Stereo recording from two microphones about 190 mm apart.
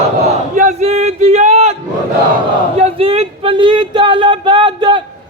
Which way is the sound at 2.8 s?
30° right (ahead or behind).